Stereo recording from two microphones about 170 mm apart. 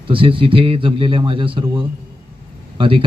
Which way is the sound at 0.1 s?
30° right (ahead or behind).